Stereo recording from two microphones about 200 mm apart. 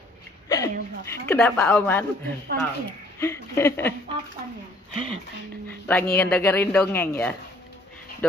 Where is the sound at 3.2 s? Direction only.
15° left (ahead or behind).